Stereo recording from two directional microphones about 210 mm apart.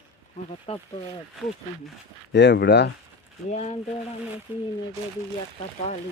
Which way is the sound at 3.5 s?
30° left (ahead or behind).